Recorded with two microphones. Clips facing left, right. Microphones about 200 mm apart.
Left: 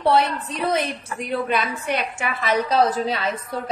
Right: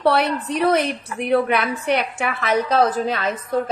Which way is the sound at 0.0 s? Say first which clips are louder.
Right 1 dB; 65° right (ahead or behind).